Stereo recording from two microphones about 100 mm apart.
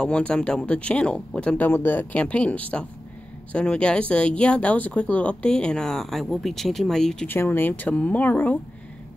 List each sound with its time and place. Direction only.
0.0 s speech: 10° left (ahead or behind)
7.2 s speech: 20° left (ahead or behind)